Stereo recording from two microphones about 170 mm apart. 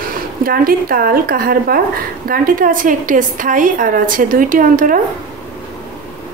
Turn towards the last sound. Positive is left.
turn(degrees=-55)  # may be behind; listen again after turning